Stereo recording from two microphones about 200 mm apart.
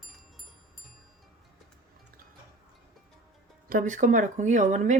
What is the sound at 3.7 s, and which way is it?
A woman's voice, 45° right (ahead or behind).